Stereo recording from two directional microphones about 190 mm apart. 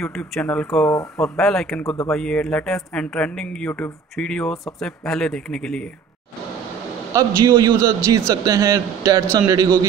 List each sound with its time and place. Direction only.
0.0 s speech: centre (ahead or behind)
7.2 s a man's voice: 20° right (ahead or behind)